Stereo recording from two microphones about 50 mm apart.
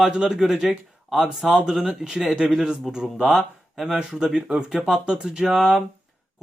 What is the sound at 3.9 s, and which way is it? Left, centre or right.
Speech, centre.